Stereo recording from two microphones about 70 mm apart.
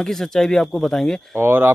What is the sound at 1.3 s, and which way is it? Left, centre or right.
Speech, right.